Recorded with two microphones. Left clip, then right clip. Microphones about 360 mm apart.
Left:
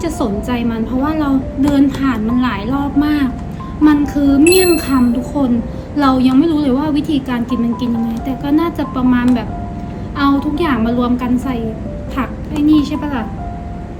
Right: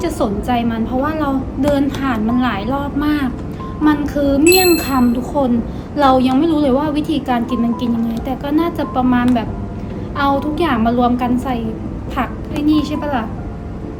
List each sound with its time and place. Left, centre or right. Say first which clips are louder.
0.0 s a woman's voice: even; centre